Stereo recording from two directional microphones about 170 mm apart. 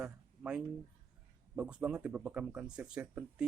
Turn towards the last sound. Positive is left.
turn(degrees=-5)  # may be behind; listen again after turning